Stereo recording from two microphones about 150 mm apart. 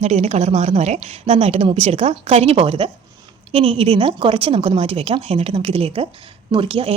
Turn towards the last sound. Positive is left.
turn(degrees=-35)  # may be behind; listen again after turning